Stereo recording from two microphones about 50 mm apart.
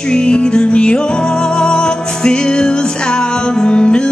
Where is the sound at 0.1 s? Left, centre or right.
Centre.